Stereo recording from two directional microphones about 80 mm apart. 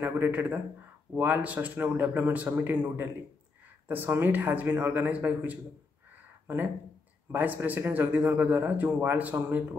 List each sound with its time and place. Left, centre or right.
0.0 s a man's voice: right